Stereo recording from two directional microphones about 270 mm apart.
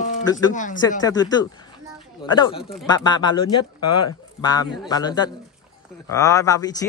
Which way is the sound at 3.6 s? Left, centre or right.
Left.